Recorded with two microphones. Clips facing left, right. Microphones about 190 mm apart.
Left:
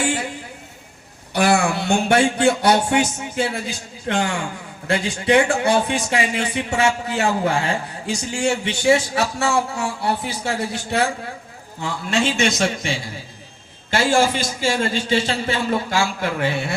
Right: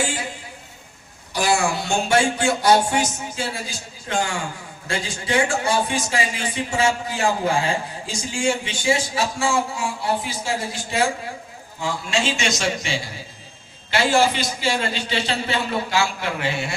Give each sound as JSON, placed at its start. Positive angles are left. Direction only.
{"t": 1.3, "sound": "a man's voice", "side_deg": 60}